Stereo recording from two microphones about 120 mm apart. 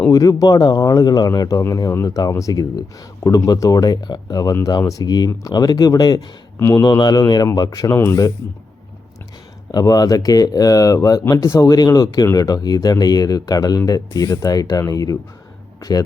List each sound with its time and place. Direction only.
0.1 s speech: 30° left (ahead or behind)
6.8 s speech: 35° left (ahead or behind)
9.7 s speech: 30° left (ahead or behind)